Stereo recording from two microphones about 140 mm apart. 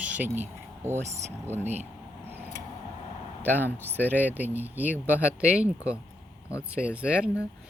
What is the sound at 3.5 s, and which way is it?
Speech, 15° left (ahead or behind).